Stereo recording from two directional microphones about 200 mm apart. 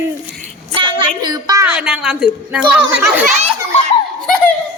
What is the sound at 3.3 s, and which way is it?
Speech, 35° right (ahead or behind).